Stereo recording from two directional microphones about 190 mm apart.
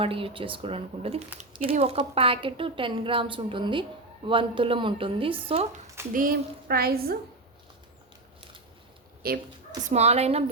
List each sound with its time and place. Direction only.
0.0 s speech: 30° right (ahead or behind)
6.1 s a woman's voice: 50° right (ahead or behind)
9.2 s a woman's voice: 50° right (ahead or behind)
9.9 s a woman's voice: 35° right (ahead or behind)